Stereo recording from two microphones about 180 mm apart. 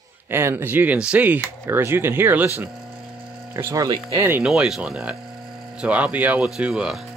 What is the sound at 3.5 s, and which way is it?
Speech, 15° right (ahead or behind).